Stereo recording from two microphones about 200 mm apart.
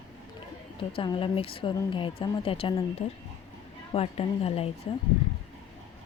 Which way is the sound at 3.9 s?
30° left (ahead or behind).